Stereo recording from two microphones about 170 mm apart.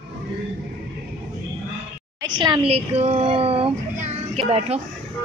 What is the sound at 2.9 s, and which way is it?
Speech, 35° right (ahead or behind).